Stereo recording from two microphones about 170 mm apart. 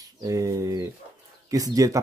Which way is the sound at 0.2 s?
20° right (ahead or behind).